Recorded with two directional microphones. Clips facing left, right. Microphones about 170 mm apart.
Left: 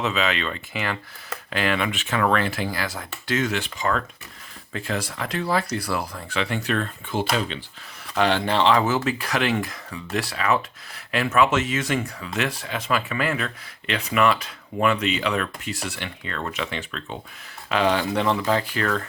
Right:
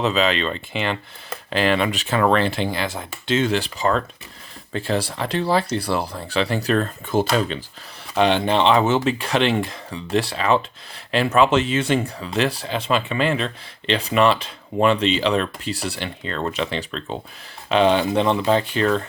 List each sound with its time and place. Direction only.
0.0 s speech: 35° right (ahead or behind)
8.1 s speech: 20° right (ahead or behind)